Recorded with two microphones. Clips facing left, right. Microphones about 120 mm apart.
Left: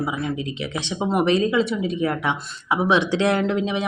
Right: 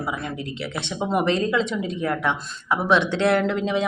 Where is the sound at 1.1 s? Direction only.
10° left (ahead or behind).